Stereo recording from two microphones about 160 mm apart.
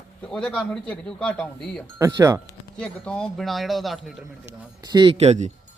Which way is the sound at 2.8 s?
5° left (ahead or behind).